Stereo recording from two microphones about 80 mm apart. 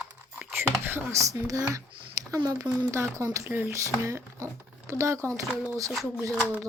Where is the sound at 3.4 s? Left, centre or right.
Right.